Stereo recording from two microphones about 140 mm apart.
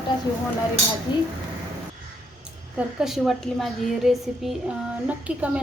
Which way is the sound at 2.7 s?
5° right (ahead or behind).